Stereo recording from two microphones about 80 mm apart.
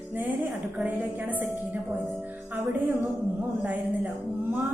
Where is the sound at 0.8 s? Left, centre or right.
Centre.